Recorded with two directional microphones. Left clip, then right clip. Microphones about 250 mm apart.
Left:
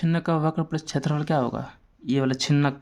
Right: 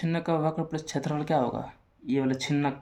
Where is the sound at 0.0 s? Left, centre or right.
Left.